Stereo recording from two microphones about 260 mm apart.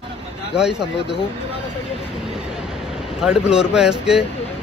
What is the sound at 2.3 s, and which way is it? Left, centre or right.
Vehicle, centre.